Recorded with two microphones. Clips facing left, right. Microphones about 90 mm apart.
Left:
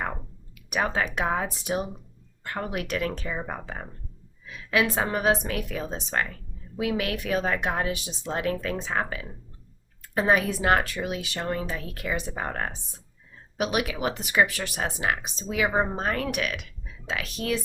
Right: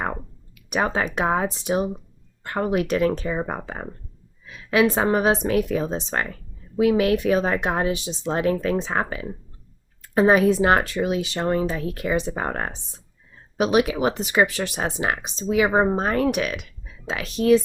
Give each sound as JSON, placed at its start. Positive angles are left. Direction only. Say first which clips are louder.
{"t": 0.7, "sound": "speech", "louder": "right 3 dB", "side_deg": -25}
{"t": 15.6, "sound": "speech", "louder": "right 4 dB", "side_deg": -35}